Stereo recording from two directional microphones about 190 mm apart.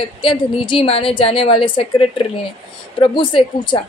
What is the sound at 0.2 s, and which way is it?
A woman's voice, 25° left (ahead or behind).